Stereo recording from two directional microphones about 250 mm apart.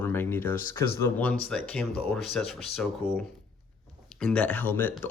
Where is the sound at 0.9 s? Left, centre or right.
Centre.